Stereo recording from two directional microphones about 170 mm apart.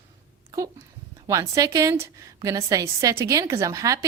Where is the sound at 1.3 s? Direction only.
20° right (ahead or behind).